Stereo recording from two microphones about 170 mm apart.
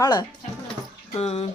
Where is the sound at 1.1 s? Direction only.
35° left (ahead or behind).